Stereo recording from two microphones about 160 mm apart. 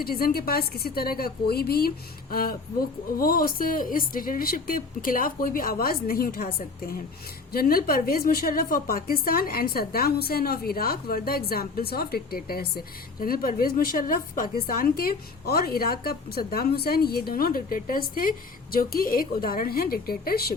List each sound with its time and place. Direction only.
0.0 s a woman's voice: 70° left (ahead or behind)
7.5 s a woman's voice: 70° left (ahead or behind)